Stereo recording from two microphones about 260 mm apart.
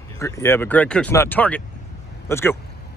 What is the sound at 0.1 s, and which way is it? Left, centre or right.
Speech, centre.